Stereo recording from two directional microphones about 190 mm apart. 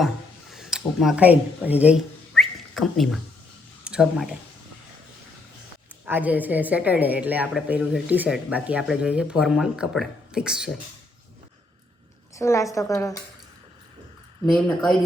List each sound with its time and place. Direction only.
0.5 s speech: centre (ahead or behind)
2.3 s a sound: centre (ahead or behind)
3.8 s speech: 5° right (ahead or behind)
6.1 s a woman's voice: 10° right (ahead or behind)
12.4 s a woman's voice: 15° left (ahead or behind)